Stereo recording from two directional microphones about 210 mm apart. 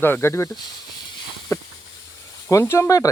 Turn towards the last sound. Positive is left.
turn(degrees=15)  # may be behind; listen again after turning